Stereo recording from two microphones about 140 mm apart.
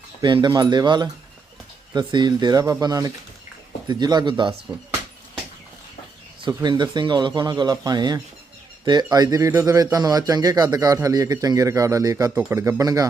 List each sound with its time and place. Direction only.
0.2 s speech: 30° right (ahead or behind)
6.5 s speech: 30° right (ahead or behind)